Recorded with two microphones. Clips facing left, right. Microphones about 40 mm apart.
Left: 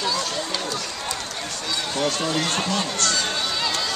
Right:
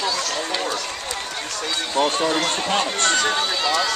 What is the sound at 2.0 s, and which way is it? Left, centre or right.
Speech, right.